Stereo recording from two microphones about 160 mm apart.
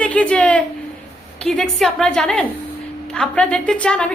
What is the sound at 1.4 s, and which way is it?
Child singing, centre (ahead or behind).